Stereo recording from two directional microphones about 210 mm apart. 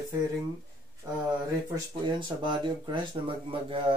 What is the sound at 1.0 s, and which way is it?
Speech, 20° right (ahead or behind).